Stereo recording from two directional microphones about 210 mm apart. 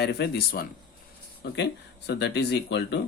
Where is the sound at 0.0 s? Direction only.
50° left (ahead or behind).